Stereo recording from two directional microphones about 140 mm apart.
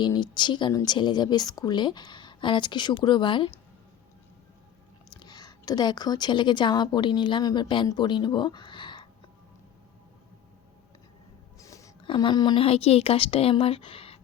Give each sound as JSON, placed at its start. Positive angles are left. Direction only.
{"t": 0.0, "sound": "speech", "side_deg": 30}
{"t": 5.2, "sound": "speech", "side_deg": 30}
{"t": 11.6, "sound": "a sound", "side_deg": 25}
{"t": 12.0, "sound": "speech", "side_deg": 35}